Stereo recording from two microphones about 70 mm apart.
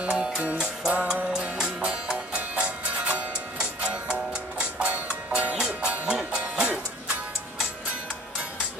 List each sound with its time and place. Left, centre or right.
0.2 s music: centre